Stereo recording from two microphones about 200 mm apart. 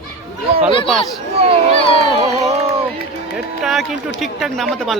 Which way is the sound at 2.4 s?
30° right (ahead or behind).